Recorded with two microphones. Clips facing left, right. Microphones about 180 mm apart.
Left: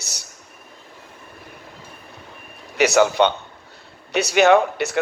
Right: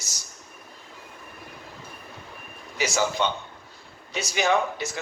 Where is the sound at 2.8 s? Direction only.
65° left (ahead or behind).